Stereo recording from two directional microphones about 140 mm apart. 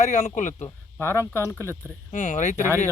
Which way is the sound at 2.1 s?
65° left (ahead or behind).